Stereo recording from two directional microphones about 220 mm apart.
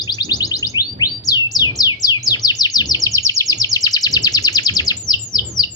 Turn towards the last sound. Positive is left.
turn(degrees=20)  # may be behind; listen again after turning